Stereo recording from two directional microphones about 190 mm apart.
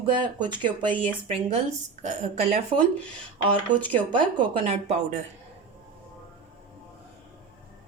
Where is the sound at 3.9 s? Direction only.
25° right (ahead or behind).